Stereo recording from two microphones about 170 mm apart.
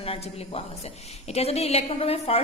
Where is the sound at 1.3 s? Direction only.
40° left (ahead or behind).